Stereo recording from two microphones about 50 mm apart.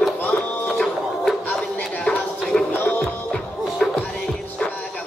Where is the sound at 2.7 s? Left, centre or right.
Left.